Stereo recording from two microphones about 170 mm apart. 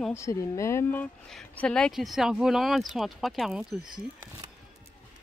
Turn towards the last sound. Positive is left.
turn(degrees=-5)  # may be behind; listen again after turning